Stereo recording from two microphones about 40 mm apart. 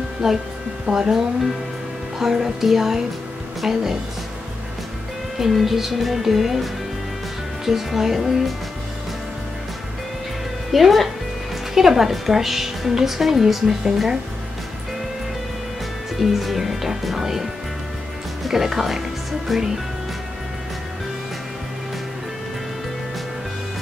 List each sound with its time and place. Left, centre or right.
0.2 s speech: centre
5.5 s a woman's voice: centre
10.7 s a woman's voice: centre
16.2 s a woman's voice: centre